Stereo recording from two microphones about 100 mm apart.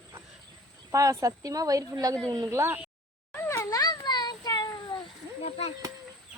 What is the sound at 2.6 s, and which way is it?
Speech, 25° right (ahead or behind).